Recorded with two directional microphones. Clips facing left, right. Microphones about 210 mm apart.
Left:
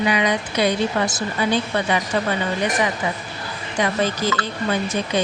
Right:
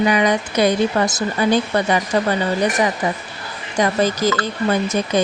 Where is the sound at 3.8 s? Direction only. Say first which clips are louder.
Right 4 dB; 40° right (ahead or behind).